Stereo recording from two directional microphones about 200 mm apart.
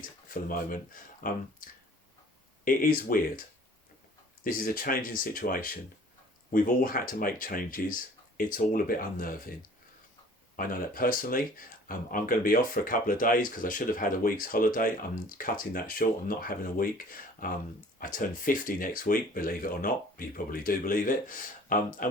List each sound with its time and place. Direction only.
1.2 s speech: 45° left (ahead or behind)
2.6 s speech: 45° left (ahead or behind)
4.4 s speech: 45° left (ahead or behind)
10.6 s speech: 45° left (ahead or behind)